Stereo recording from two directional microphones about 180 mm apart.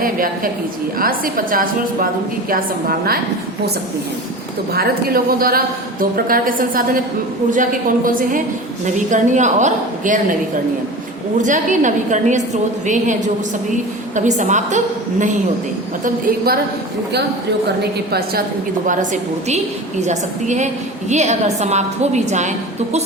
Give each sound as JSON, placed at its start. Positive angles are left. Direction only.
{"t": 0.0, "sound": "a woman's voice", "side_deg": -50}
{"t": 4.7, "sound": "a woman's voice", "side_deg": -60}
{"t": 11.3, "sound": "a woman's voice", "side_deg": -45}
{"t": 16.0, "sound": "a woman's voice", "side_deg": -55}
{"t": 18.9, "sound": "a woman's voice", "side_deg": -45}